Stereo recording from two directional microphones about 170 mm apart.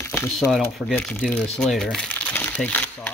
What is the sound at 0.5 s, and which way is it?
Speech, centre (ahead or behind).